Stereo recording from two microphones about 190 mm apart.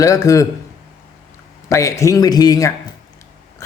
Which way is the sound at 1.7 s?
15° left (ahead or behind).